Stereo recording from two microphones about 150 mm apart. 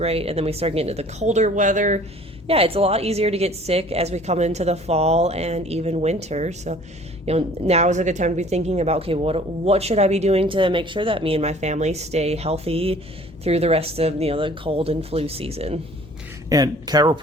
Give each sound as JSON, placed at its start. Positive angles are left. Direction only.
{"t": 0.0, "sound": "a woman's voice", "side_deg": -40}
{"t": 2.5, "sound": "a woman's voice", "side_deg": -40}
{"t": 16.5, "sound": "speech", "side_deg": -25}